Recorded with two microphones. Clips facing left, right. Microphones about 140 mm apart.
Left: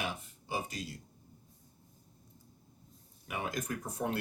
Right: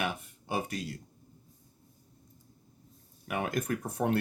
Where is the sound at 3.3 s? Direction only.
60° right (ahead or behind).